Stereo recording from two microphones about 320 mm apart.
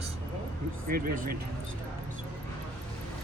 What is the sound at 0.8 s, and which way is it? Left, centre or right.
Speech, right.